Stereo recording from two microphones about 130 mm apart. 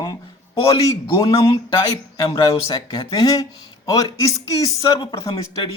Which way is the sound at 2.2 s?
45° left (ahead or behind).